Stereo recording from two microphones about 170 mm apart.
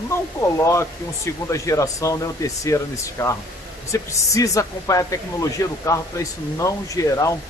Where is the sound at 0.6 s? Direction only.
15° left (ahead or behind).